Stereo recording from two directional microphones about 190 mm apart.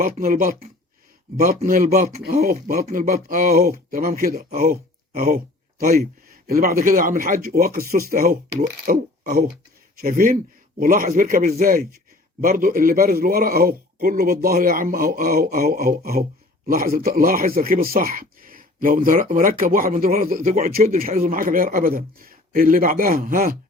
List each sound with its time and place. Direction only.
0.0 s speech: 45° right (ahead or behind)